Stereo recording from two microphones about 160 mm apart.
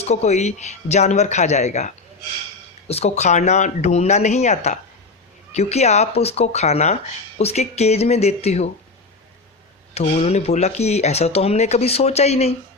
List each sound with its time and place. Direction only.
0.0 s speech: 45° left (ahead or behind)
10.2 s speech: 40° left (ahead or behind)